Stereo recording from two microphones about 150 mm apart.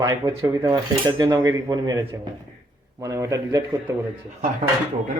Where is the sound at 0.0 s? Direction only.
25° right (ahead or behind).